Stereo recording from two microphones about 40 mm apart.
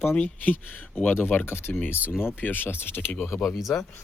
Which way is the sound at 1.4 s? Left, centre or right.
Left.